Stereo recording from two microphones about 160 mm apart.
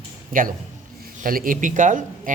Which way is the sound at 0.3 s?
60° right (ahead or behind).